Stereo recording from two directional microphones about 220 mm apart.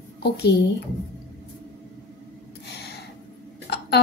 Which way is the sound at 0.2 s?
50° left (ahead or behind).